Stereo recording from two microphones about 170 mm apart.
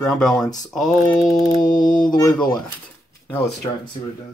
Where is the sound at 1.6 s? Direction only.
25° left (ahead or behind).